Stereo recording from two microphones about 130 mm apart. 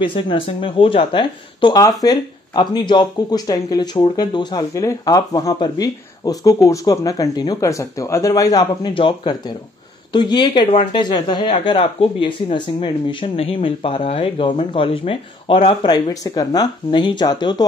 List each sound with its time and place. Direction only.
0.0 s speech: 40° left (ahead or behind)